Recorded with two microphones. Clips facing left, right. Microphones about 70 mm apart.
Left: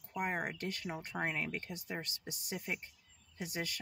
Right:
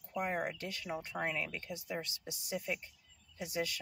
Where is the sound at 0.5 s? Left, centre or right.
Left.